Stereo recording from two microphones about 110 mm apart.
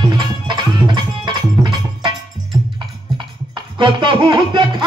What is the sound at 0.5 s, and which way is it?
Music, 45° right (ahead or behind).